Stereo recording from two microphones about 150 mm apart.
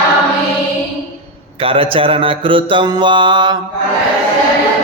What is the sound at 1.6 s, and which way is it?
Mantra, 40° right (ahead or behind).